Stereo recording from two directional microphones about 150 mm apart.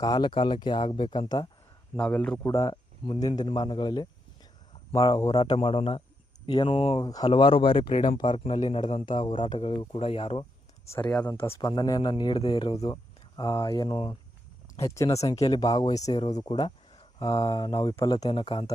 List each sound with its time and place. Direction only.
0.0 s speech: 30° left (ahead or behind)
2.0 s a man's voice: 10° left (ahead or behind); by 7.0 s 40° left (ahead or behind)
7.0 s speech: 25° left (ahead or behind)
8.5 s a man's voice: 50° left (ahead or behind)
9.0 s speech: 30° left (ahead or behind)
11.4 s a man's voice: 20° left (ahead or behind); by 14.2 s 35° left (ahead or behind)
14.8 s speech: 20° left (ahead or behind)
16.5 s a sound: 35° left (ahead or behind)
17.2 s speech: 25° left (ahead or behind)